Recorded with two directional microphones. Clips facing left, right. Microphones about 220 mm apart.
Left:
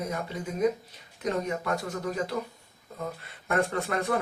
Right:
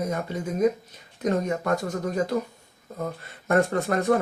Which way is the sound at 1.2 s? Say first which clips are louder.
Right 5 dB; 45° right (ahead or behind).